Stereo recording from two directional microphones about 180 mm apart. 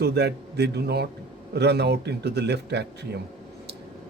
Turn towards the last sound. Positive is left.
turn(degrees=-70)  # may be behind; listen again after turning